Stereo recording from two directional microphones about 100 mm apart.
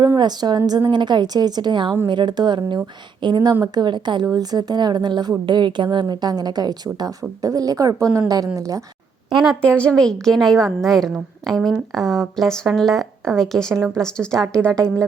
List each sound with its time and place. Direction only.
0.2 s a woman's voice: 45° right (ahead or behind)
9.6 s a woman's voice: 10° left (ahead or behind)